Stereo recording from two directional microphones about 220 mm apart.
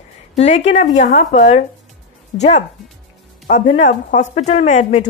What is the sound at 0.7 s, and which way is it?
Speech, 35° left (ahead or behind).